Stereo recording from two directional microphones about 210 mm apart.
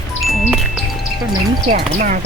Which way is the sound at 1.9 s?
40° right (ahead or behind).